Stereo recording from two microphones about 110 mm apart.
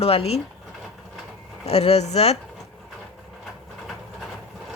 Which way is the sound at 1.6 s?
70° left (ahead or behind).